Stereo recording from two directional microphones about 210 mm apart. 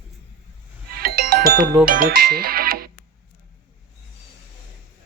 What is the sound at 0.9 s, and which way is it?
Music, 45° right (ahead or behind).